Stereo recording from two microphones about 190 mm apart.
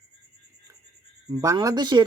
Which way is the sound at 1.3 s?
20° right (ahead or behind).